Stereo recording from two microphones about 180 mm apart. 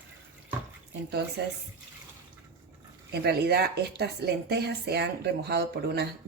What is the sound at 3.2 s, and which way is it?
Speech, 65° right (ahead or behind).